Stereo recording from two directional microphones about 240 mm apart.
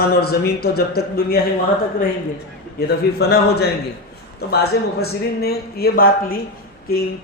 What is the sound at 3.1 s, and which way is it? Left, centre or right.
A man's voice, left.